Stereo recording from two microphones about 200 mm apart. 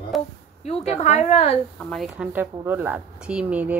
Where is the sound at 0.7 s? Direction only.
35° left (ahead or behind).